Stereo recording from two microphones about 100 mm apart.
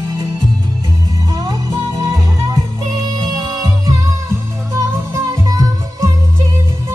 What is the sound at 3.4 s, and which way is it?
Music, centre (ahead or behind).